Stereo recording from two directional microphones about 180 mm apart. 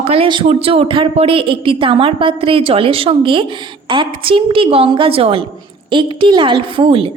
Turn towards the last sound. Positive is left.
turn(degrees=-30)  # may be behind; listen again after turning